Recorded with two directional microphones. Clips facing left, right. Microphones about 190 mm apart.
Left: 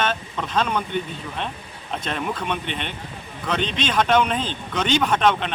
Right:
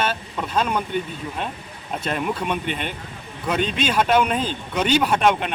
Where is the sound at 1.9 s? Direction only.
10° right (ahead or behind).